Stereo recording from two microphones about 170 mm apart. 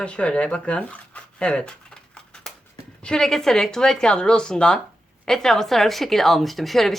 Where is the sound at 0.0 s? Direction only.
5° left (ahead or behind).